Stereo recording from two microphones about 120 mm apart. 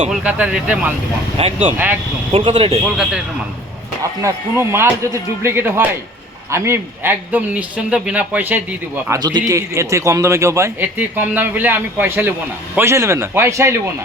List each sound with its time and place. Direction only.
0.1 s a man's voice: 10° right (ahead or behind)
1.4 s speech: 50° right (ahead or behind)
2.8 s speech: 5° right (ahead or behind)
4.2 s a man's voice: 20° right (ahead or behind)
9.0 s a man's voice: 35° right (ahead or behind)